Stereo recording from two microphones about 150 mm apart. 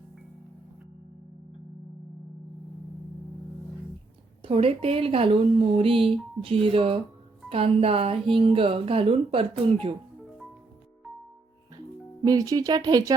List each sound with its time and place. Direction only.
4.4 s a woman's voice: 40° right (ahead or behind)
12.2 s speech: 25° right (ahead or behind)